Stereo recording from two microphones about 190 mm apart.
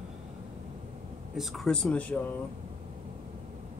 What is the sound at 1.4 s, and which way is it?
Speech, centre (ahead or behind).